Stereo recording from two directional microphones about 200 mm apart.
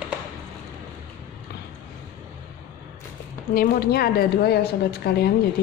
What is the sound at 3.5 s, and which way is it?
A woman's voice, 45° left (ahead or behind).